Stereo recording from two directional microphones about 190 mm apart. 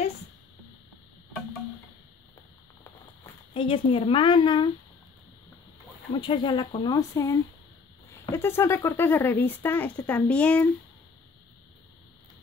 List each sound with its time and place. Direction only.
3.5 s speech: 30° left (ahead or behind)
6.1 s speech: 25° left (ahead or behind); by 10.7 s 5° left (ahead or behind)